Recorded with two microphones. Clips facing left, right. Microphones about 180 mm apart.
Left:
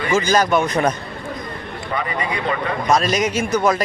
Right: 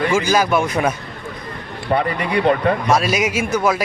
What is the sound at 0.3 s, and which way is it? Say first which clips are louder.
Speech: even; 5° right (ahead or behind).